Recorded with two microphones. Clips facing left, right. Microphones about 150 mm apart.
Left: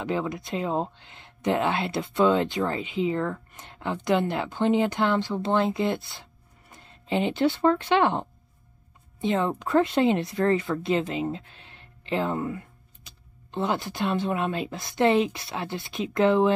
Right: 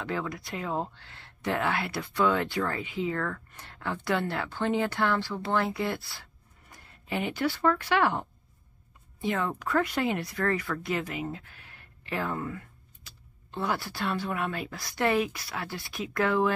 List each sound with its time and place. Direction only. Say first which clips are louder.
0.0 s speech: left 5 dB; 20° left (ahead or behind)